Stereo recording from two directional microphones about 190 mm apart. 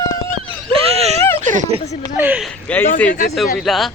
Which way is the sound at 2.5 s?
10° left (ahead or behind).